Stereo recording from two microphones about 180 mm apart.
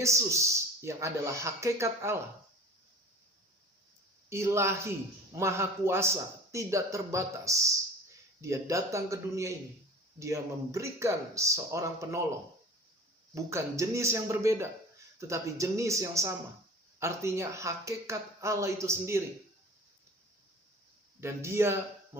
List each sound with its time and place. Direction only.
0.0 s a man's voice: 15° right (ahead or behind)
4.3 s a man's voice: 15° right (ahead or behind)
13.3 s a man's voice: 15° right (ahead or behind)
21.2 s speech: 15° right (ahead or behind)